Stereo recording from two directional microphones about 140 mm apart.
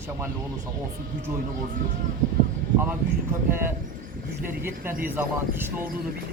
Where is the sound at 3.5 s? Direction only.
15° right (ahead or behind).